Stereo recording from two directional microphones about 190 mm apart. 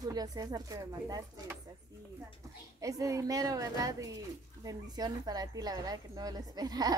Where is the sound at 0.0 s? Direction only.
20° right (ahead or behind).